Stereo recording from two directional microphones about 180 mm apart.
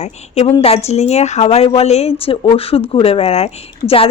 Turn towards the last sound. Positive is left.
turn(degrees=35)  # may be behind; listen again after turning